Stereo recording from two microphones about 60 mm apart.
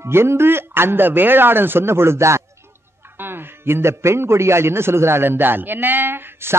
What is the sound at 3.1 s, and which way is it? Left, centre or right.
A man's voice, right.